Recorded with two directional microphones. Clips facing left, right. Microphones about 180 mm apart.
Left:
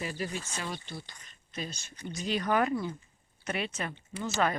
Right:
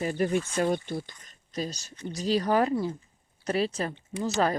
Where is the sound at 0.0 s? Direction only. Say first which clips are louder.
Right 9 dB; 50° right (ahead or behind).